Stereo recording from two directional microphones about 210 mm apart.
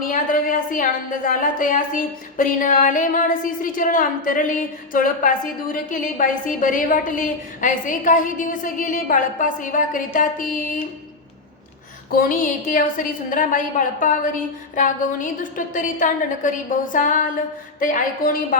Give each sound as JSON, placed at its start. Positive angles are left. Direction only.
{"t": 0.0, "sound": "a woman's voice", "side_deg": 40}
{"t": 12.1, "sound": "a woman's voice", "side_deg": 40}